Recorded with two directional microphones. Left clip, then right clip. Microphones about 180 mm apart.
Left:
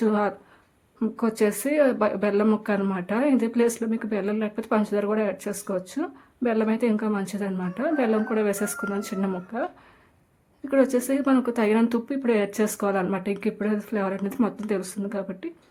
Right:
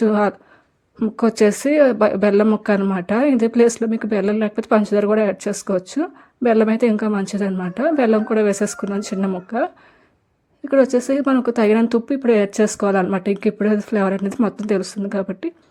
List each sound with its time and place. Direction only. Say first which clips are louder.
0.0 s speech: right 6 dB; 35° right (ahead or behind)